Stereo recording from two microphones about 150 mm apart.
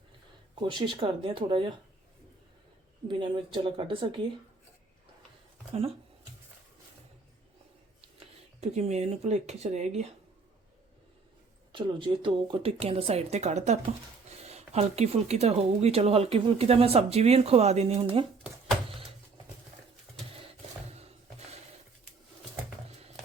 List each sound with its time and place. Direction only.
0.6 s speech: 30° right (ahead or behind)
3.1 s speech: 35° right (ahead or behind)
8.2 s speech: 45° right (ahead or behind)
11.7 s speech: 35° right (ahead or behind)
20.9 s a sound: 45° right (ahead or behind)